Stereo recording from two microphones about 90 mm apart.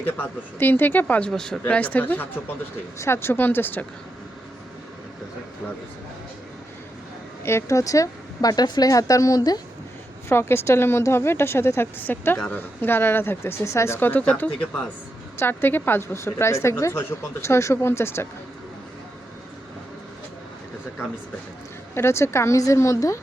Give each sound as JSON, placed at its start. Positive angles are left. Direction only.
{"t": 0.0, "sound": "a woman's voice", "side_deg": 20}
{"t": 1.3, "sound": "speech", "side_deg": 5}
{"t": 1.6, "sound": "a woman's voice", "side_deg": 15}
{"t": 7.4, "sound": "a woman's voice", "side_deg": 35}
{"t": 10.2, "sound": "a woman's voice", "side_deg": 25}
{"t": 21.9, "sound": "a woman's voice", "side_deg": 30}